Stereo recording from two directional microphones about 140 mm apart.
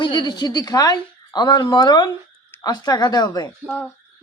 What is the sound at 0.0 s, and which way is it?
A woman's voice, 30° left (ahead or behind).